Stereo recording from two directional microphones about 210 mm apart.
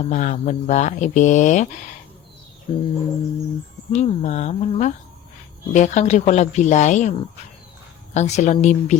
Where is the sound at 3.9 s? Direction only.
35° left (ahead or behind).